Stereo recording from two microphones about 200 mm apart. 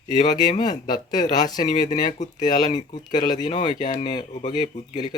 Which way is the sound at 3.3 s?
20° left (ahead or behind).